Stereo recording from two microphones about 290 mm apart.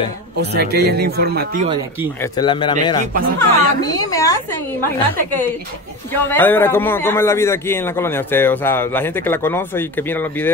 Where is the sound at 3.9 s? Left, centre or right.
Centre.